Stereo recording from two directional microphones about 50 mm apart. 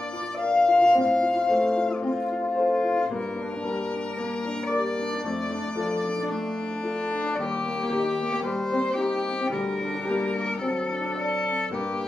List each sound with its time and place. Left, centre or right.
0.5 s music: centre
8.7 s music: centre